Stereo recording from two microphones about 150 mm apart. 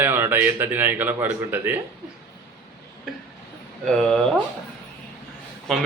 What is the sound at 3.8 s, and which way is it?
Speech, 5° left (ahead or behind).